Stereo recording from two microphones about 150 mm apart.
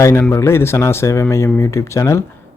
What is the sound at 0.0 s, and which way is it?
Speech, 15° left (ahead or behind).